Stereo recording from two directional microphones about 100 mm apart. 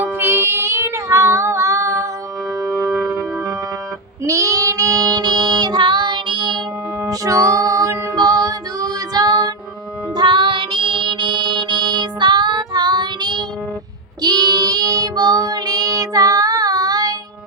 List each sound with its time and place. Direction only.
0.0 s child singing: 20° right (ahead or behind)
2.6 s organ: centre (ahead or behind)
4.2 s child singing: 30° right (ahead or behind); by 6.6 s 50° right (ahead or behind)
7.1 s music: 35° right (ahead or behind)
14.2 s child singing: 45° right (ahead or behind)